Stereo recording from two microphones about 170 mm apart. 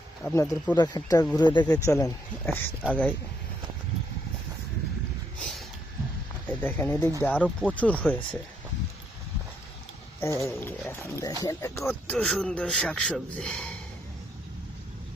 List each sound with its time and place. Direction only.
0.2 s speech: 10° left (ahead or behind)
0.8 s speech: 20° left (ahead or behind)
6.5 s speech: 10° left (ahead or behind)
10.2 s speech: 15° left (ahead or behind)
12.1 s speech: 5° left (ahead or behind)